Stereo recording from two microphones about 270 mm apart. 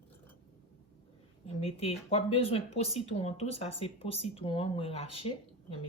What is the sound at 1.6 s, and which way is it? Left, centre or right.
Speech, left.